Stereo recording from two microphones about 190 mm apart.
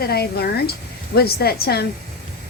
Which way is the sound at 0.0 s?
55° left (ahead or behind).